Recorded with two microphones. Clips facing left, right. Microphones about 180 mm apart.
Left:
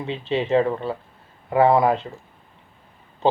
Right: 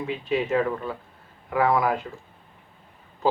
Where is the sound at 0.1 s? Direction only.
25° left (ahead or behind).